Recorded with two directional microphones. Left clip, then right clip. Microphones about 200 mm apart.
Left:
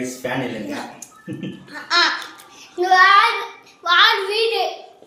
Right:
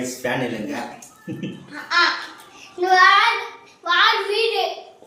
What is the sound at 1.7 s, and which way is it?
Speech, 60° left (ahead or behind).